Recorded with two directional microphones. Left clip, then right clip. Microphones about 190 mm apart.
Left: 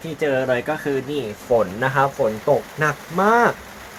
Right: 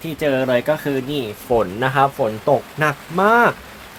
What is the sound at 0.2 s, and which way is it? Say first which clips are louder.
Speech: right 2 dB; 40° right (ahead or behind).